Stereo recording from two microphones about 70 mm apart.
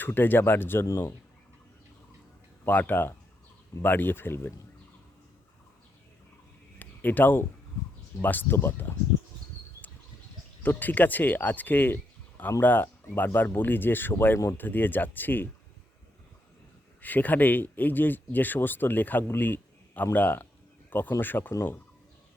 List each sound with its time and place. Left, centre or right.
0.0 s speech: left
0.9 s speech: left
2.6 s speech: left
6.7 s a sound: left
8.2 s speech: left
10.6 s speech: left
17.0 s speech: left